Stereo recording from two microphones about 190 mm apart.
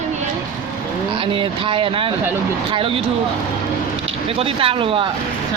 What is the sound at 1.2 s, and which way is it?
Speech, 25° right (ahead or behind).